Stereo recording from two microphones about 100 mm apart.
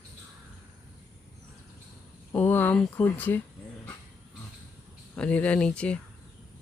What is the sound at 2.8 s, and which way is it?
Speech, 15° left (ahead or behind).